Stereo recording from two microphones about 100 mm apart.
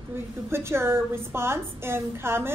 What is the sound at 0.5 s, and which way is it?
A woman's voice, 25° right (ahead or behind).